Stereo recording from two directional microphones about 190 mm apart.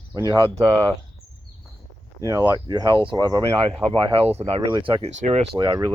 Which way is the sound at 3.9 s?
30° right (ahead or behind).